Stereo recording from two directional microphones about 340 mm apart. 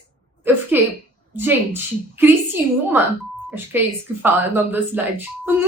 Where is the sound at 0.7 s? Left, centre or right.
Centre.